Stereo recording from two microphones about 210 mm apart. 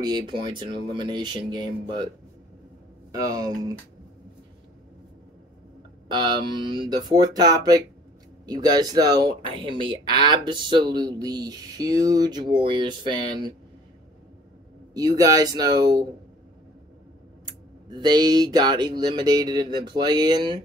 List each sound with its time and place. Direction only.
0.0 s speech: 20° right (ahead or behind)
3.1 s speech: 15° right (ahead or behind)
6.0 s speech: 20° right (ahead or behind)
15.0 s speech: 20° right (ahead or behind)
17.8 s speech: 20° right (ahead or behind)